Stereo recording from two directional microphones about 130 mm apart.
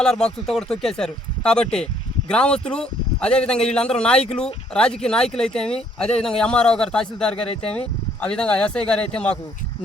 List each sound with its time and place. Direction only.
0.0 s speech: 5° left (ahead or behind)